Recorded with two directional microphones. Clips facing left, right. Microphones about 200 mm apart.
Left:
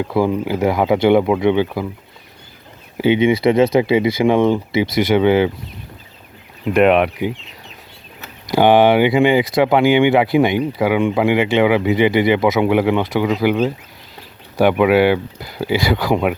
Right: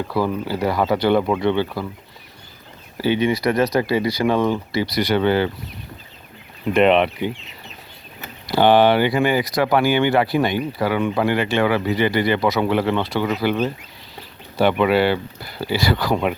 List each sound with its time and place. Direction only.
0.0 s speech: 20° left (ahead or behind)
3.0 s speech: 20° left (ahead or behind)
6.7 s speech: 5° left (ahead or behind)
8.4 s speech: 15° left (ahead or behind)